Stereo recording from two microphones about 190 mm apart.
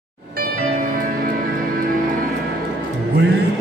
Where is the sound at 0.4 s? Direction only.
45° right (ahead or behind).